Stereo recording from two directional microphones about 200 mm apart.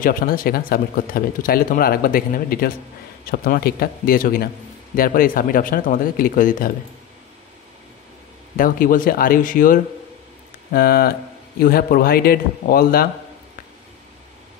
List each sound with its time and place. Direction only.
0.0 s speech: 45° left (ahead or behind)
8.5 s speech: 45° left (ahead or behind)